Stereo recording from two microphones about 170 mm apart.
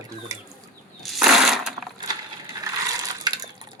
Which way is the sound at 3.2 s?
25° right (ahead or behind).